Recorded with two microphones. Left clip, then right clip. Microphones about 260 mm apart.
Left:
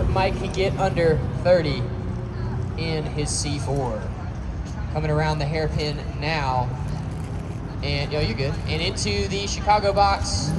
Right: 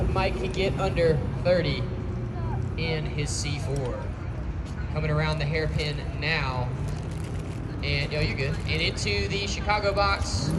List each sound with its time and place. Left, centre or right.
0.1 s vehicle: left
0.6 s speech: left
2.8 s speech: centre
4.9 s speech: centre
7.9 s speech: centre